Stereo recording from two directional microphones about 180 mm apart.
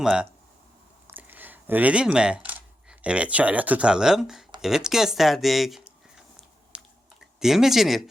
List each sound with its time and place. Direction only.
0.0 s speech: 5° right (ahead or behind)
1.0 s a sound: 10° right (ahead or behind)
3.0 s speech: 5° right (ahead or behind)
6.7 s chewing: 5° right (ahead or behind)
7.3 s speech: centre (ahead or behind)